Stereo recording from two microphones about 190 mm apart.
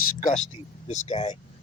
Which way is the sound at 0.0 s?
40° left (ahead or behind).